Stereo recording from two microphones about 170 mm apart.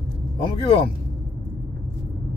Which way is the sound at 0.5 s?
35° left (ahead or behind).